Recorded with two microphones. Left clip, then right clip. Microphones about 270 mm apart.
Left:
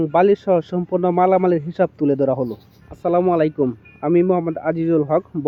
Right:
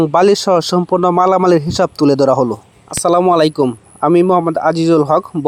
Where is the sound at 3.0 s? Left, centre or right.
Right.